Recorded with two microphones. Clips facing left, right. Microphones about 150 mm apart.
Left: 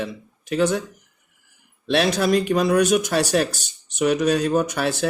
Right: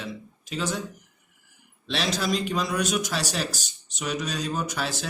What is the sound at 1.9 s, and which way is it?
Speech, 55° left (ahead or behind).